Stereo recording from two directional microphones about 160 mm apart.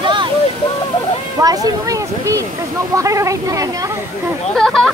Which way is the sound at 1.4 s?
25° right (ahead or behind).